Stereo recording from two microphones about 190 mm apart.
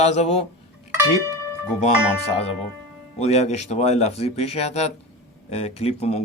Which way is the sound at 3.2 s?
35° left (ahead or behind).